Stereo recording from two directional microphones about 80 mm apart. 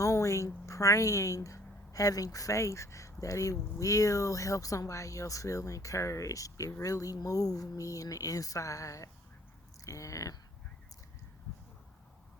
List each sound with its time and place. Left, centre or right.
0.0 s a woman's voice: left